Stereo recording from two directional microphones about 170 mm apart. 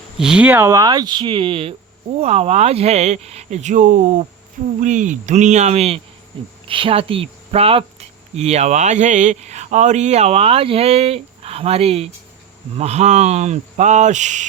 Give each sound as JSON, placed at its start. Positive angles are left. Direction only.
{"t": 0.2, "sound": "speech", "side_deg": -5}